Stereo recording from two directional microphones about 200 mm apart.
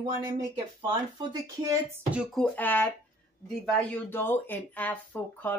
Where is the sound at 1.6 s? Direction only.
15° right (ahead or behind).